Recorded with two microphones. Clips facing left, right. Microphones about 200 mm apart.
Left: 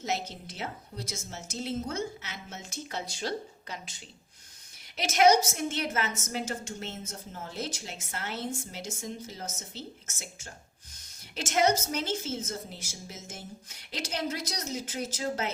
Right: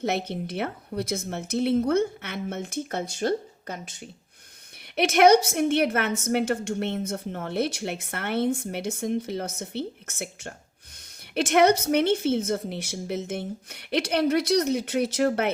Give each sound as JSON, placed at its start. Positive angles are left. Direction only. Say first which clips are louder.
{"t": 0.0, "sound": "a woman's voice", "louder": "right 7 dB", "side_deg": -60}